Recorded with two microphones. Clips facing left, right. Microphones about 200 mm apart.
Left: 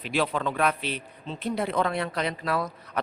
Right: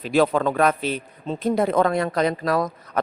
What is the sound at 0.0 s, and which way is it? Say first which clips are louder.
Speech: right 8 dB; 45° right (ahead or behind).